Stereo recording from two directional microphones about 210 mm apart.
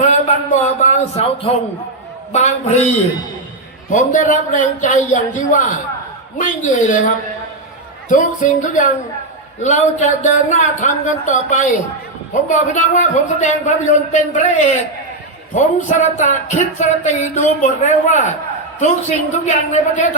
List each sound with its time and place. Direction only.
0.0 s a man's voice: 35° left (ahead or behind)
8.1 s a man's voice: 40° left (ahead or behind)